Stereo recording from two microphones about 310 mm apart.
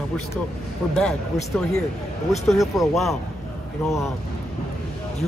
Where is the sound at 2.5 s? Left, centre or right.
Centre.